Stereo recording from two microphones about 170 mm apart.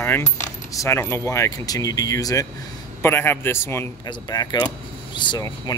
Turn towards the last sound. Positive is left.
turn(degrees=25)  # may be behind; listen again after turning